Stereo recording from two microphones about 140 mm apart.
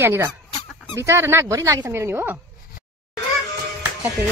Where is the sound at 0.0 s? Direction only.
20° right (ahead or behind).